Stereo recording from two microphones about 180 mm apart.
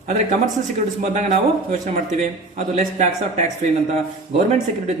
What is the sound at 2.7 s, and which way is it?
Speech, 35° right (ahead or behind).